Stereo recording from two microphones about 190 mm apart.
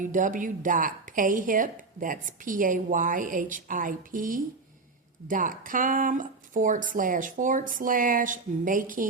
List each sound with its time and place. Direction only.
0.0 s a woman's voice: 45° right (ahead or behind)